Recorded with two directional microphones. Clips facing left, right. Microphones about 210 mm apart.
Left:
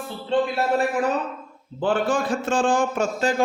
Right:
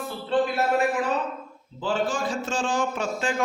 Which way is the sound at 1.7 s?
60° left (ahead or behind).